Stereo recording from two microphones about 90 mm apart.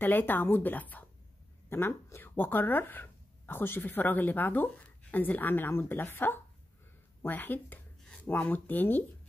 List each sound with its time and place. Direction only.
0.0 s speech: 20° left (ahead or behind)